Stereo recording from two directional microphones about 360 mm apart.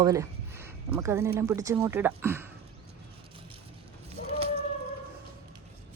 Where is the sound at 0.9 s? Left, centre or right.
Centre.